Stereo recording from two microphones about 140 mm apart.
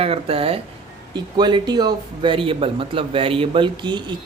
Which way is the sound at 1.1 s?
30° right (ahead or behind).